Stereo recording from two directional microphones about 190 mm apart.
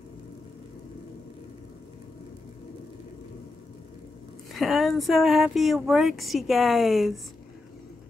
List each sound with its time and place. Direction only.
4.6 s speech: centre (ahead or behind)